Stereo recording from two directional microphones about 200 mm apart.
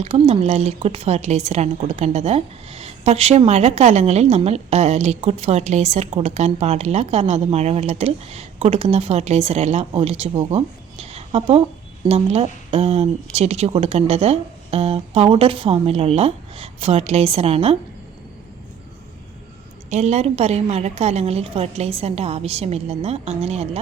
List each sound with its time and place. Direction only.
0.0 s a woman's voice: 30° right (ahead or behind)
19.9 s a woman's voice: 35° right (ahead or behind)